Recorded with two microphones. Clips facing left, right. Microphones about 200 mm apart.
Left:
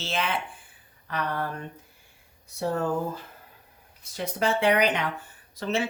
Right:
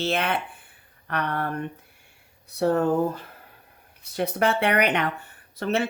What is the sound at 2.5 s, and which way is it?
Speech, 65° right (ahead or behind).